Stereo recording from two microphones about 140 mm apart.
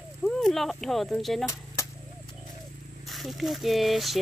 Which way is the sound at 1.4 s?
20° left (ahead or behind).